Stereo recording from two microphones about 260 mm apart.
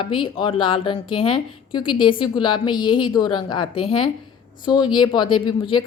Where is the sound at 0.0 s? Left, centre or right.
Centre.